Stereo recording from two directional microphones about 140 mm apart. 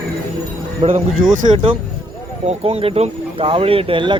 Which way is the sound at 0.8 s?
40° right (ahead or behind).